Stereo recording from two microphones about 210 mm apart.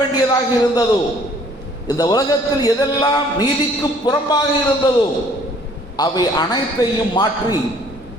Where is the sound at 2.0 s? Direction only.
20° left (ahead or behind).